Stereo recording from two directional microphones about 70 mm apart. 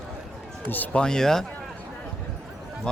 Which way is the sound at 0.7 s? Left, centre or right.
Left.